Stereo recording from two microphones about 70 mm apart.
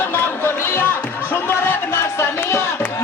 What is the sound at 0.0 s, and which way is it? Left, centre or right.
Music, left.